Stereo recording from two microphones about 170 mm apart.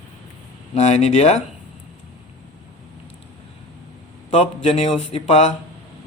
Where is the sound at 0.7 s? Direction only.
40° left (ahead or behind).